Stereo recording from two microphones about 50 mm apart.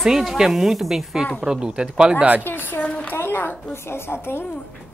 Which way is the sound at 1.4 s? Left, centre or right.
Centre.